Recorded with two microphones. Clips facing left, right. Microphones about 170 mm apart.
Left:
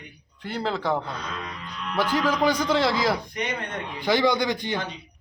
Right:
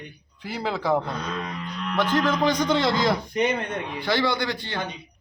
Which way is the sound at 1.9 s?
10° left (ahead or behind).